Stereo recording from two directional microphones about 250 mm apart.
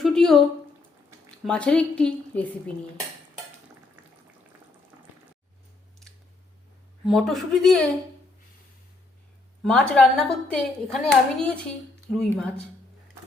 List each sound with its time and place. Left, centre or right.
0.0 s a sound: centre
1.5 s speech: centre
7.0 s speech: centre
9.6 s speech: centre